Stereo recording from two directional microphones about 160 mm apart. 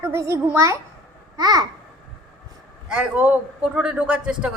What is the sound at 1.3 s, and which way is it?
Babbling, 25° right (ahead or behind).